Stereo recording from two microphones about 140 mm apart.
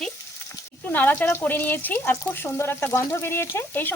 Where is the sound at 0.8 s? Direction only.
15° left (ahead or behind).